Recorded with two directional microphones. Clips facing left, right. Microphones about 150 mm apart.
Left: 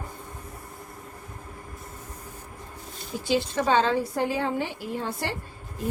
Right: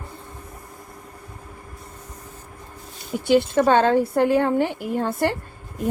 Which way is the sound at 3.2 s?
55° right (ahead or behind).